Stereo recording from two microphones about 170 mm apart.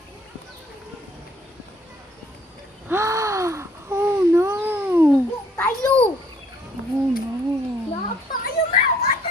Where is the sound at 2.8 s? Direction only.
15° right (ahead or behind).